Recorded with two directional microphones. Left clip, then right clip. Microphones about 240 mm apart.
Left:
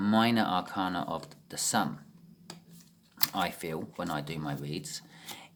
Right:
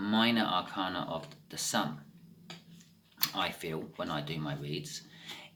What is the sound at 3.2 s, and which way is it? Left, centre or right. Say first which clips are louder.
Speech: left 2 dB; left.